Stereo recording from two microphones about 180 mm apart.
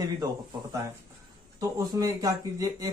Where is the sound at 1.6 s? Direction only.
20° right (ahead or behind).